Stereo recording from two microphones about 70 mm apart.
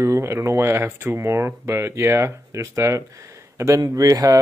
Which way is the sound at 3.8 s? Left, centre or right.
Right.